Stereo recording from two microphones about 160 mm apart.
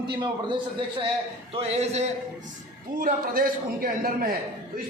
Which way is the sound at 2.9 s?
60° right (ahead or behind).